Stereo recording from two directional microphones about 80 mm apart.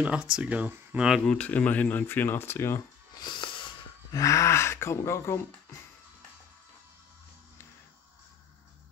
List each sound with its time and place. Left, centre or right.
0.0 s speech: centre
1.2 s speech: centre; by 2.8 s left
3.2 s music: left
4.1 s speech: left